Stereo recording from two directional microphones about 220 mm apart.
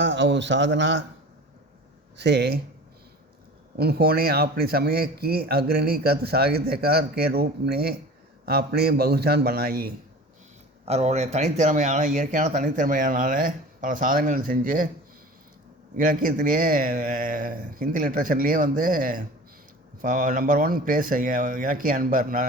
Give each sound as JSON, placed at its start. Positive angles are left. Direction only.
{"t": 0.0, "sound": "a man's voice", "side_deg": -55}
{"t": 2.1, "sound": "speech", "side_deg": -50}
{"t": 3.8, "sound": "speech", "side_deg": -45}
{"t": 10.8, "sound": "speech", "side_deg": -30}
{"t": 16.0, "sound": "speech", "side_deg": -40}